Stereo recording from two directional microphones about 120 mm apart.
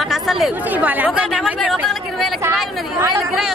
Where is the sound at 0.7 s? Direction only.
15° right (ahead or behind).